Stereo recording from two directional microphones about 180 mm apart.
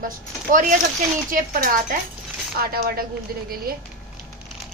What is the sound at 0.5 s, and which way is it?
A child's voice, 50° right (ahead or behind).